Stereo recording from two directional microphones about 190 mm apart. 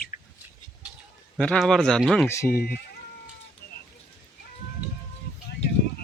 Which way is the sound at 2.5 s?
50° left (ahead or behind).